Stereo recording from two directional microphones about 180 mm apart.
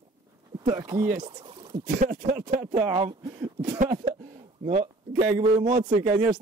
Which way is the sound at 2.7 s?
30° right (ahead or behind).